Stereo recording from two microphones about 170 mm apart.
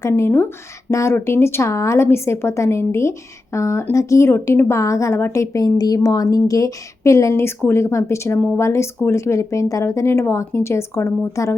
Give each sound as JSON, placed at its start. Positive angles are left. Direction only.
{"t": 0.0, "sound": "a woman's voice", "side_deg": 15}